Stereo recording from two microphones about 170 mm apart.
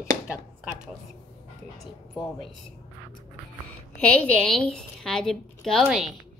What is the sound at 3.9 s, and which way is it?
A woman's voice, 5° left (ahead or behind).